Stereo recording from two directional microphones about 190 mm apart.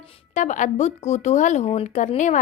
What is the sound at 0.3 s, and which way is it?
A woman's voice, 40° left (ahead or behind).